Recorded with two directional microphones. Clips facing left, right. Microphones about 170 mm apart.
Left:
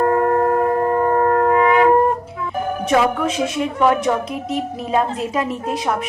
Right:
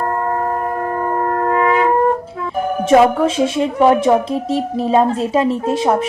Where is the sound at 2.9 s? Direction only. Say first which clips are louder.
Right 6 dB; 30° right (ahead or behind).